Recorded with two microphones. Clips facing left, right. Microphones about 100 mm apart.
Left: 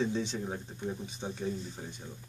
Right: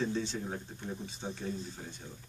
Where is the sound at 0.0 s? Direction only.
15° left (ahead or behind).